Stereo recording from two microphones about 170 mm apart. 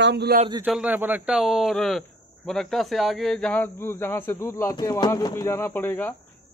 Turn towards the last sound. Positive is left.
turn(degrees=10)  # may be behind; listen again after turning